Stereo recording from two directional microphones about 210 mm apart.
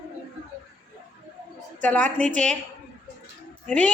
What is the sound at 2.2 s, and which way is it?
Speech, 35° right (ahead or behind).